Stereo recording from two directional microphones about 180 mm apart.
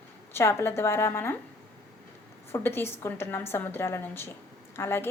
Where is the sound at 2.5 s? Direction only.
15° left (ahead or behind).